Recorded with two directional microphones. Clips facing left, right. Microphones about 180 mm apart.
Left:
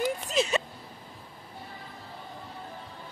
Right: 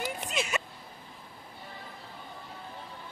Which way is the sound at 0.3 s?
35° left (ahead or behind).